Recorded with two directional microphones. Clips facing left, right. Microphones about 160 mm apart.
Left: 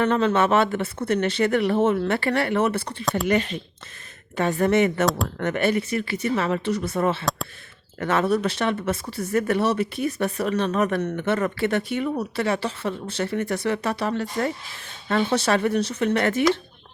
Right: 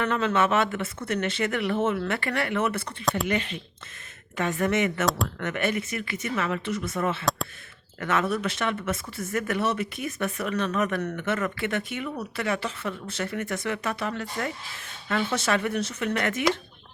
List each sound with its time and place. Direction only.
0.0 s speech: 35° left (ahead or behind)
3.0 s speech: centre (ahead or behind)
3.2 s speech: 40° left (ahead or behind)
5.0 s speech: centre (ahead or behind)
5.4 s speech: 35° left (ahead or behind)